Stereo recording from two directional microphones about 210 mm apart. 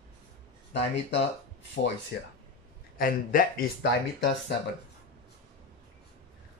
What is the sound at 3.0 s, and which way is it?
Speech, 40° left (ahead or behind).